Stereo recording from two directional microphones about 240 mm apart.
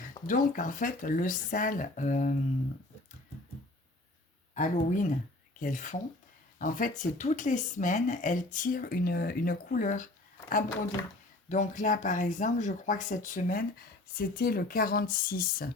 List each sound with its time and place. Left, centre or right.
0.0 s speech: left
4.5 s speech: left
11.4 s speech: left